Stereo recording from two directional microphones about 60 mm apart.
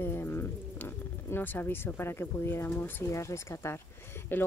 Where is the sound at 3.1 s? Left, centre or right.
Left.